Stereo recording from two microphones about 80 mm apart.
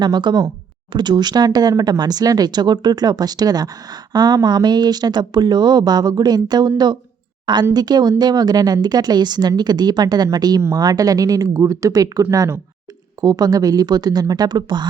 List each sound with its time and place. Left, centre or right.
0.0 s speech: right